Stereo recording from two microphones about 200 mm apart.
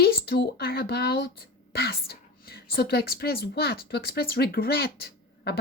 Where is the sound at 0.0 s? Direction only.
50° left (ahead or behind).